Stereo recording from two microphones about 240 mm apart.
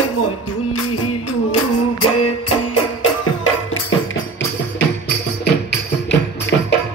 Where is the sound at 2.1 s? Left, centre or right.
Left.